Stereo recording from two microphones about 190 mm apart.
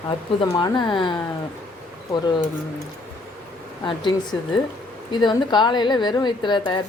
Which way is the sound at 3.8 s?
25° left (ahead or behind).